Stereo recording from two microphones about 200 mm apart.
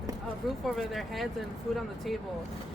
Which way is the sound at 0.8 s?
Centre (ahead or behind).